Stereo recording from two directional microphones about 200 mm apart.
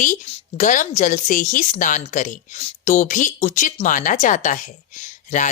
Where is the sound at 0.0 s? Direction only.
40° left (ahead or behind).